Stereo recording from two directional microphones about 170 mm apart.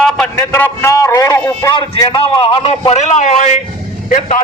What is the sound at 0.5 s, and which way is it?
Speech, 15° left (ahead or behind).